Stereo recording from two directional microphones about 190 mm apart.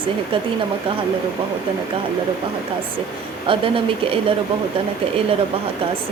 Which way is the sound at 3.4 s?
30° right (ahead or behind).